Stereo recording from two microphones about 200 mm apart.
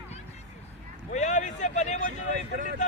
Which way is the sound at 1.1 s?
35° left (ahead or behind).